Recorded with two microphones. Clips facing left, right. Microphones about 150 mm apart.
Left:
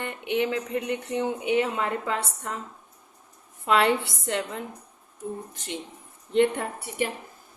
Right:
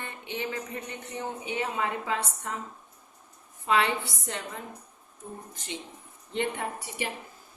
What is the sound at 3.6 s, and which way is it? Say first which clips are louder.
A woman's voice: left 4 dB; 65° left (ahead or behind).